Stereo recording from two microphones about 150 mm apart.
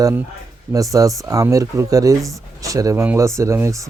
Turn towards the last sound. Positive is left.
turn(degrees=-20)  # may be behind; listen again after turning